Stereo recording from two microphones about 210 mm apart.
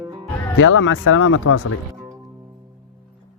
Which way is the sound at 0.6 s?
70° left (ahead or behind).